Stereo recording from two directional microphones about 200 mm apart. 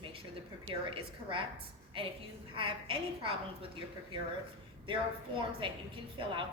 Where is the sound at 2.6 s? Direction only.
25° right (ahead or behind).